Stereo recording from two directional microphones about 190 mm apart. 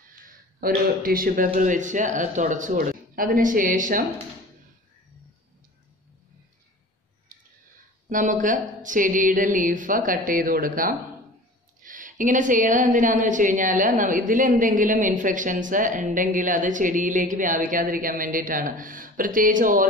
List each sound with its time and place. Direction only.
0.6 s a woman's voice: 50° right (ahead or behind)
8.1 s a woman's voice: 45° right (ahead or behind)